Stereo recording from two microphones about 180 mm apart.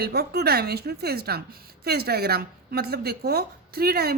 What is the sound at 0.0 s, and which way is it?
A woman's voice, 60° right (ahead or behind).